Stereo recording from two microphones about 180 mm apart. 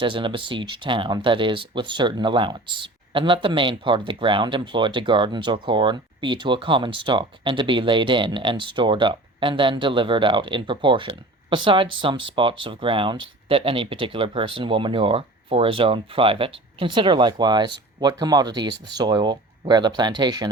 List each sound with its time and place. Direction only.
0.0 s speech: 25° right (ahead or behind)